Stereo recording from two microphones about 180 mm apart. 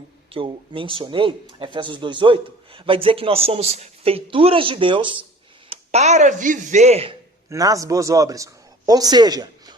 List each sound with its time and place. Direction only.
0.3 s speech: 30° right (ahead or behind)
7.5 s a man's voice: 20° right (ahead or behind)